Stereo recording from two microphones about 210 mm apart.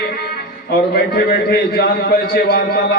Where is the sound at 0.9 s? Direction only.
50° left (ahead or behind).